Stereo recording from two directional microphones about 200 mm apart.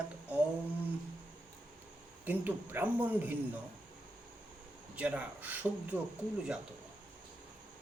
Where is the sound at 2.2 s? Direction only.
10° right (ahead or behind).